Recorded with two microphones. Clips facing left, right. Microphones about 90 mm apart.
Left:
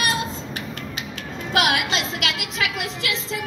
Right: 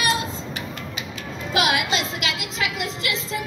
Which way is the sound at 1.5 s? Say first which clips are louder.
Even; 65° left (ahead or behind).